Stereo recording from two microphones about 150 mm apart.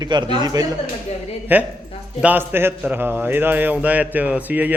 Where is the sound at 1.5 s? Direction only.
15° right (ahead or behind).